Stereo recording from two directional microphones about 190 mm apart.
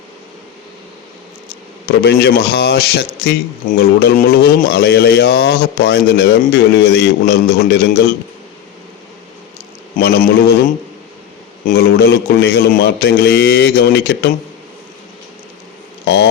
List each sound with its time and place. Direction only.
1.9 s speech: 55° left (ahead or behind)
10.0 s speech: 60° left (ahead or behind)
11.6 s speech: 55° left (ahead or behind)